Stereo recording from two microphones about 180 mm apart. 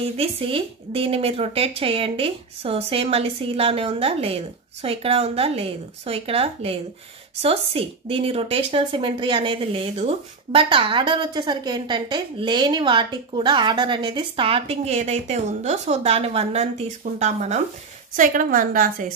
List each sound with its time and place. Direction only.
0.2 s a woman's voice: 30° right (ahead or behind); by 19.1 s 50° right (ahead or behind)